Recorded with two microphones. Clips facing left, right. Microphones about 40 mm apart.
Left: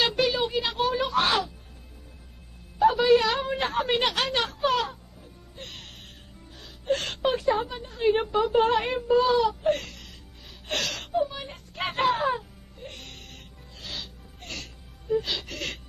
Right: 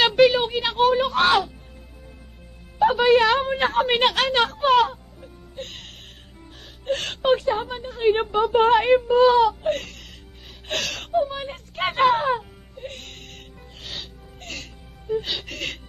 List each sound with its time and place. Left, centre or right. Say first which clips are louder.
0.0 s a sound: right 8 dB; right
2.8 s a woman's voice: right 3 dB; right
5.6 s music: right 5 dB; right
7.2 s a woman's voice: right 4 dB; right
11.1 s a woman's voice: right 5 dB; right
12.8 s music: right 5 dB; right
15.1 s a woman's voice: right 1 dB; right